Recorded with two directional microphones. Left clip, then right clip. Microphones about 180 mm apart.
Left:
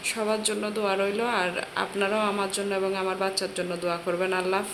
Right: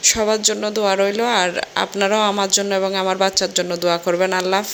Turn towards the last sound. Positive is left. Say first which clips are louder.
# right 8 dB
turn(degrees=-40)  # may be behind; listen again after turning